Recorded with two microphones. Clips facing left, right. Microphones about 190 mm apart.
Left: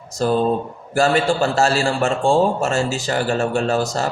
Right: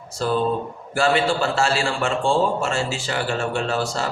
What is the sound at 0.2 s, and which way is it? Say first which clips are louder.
Speech: left 4 dB; 40° left (ahead or behind).